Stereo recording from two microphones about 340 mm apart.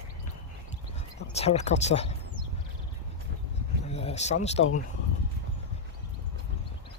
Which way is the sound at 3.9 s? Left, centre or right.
Centre.